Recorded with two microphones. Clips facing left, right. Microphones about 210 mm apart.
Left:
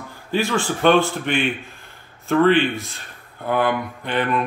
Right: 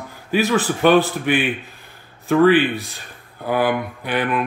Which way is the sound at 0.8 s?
10° right (ahead or behind).